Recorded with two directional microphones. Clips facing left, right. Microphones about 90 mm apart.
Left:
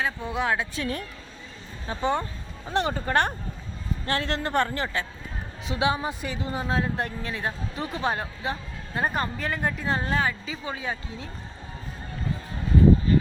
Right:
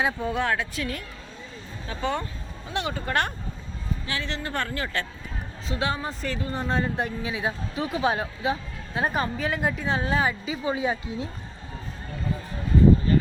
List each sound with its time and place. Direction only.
0.2 s a woman's voice: 5° left (ahead or behind)
0.4 s speech: 20° left (ahead or behind)
2.0 s speech: 20° left (ahead or behind)
2.6 s speech: 40° left (ahead or behind)
4.0 s a man's voice: 45° left (ahead or behind)
4.5 s a woman's voice: 25° left (ahead or behind)
6.6 s speech: 5° left (ahead or behind)
10.2 s speech: 15° right (ahead or behind)